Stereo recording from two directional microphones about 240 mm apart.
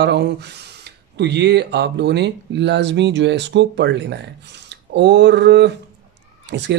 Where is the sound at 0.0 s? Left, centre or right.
Right.